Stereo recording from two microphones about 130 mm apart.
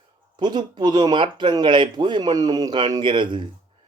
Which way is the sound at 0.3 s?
35° right (ahead or behind).